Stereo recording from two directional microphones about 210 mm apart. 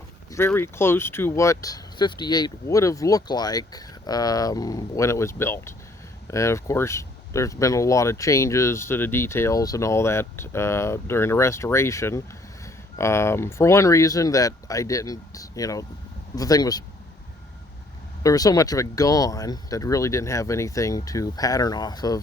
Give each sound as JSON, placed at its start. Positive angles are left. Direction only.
{"t": 0.3, "sound": "speech", "side_deg": 10}
{"t": 18.2, "sound": "speech", "side_deg": 15}